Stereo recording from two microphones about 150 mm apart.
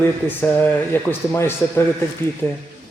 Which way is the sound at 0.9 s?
15° left (ahead or behind).